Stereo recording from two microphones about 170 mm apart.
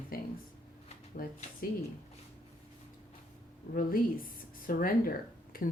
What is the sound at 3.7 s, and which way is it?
A woman's voice, 55° left (ahead or behind).